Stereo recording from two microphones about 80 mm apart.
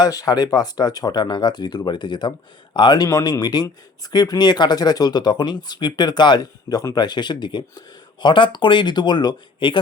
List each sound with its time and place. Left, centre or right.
0.0 s speech: left
3.1 s speech: left